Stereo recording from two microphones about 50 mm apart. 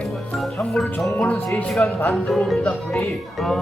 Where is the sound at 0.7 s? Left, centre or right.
Centre.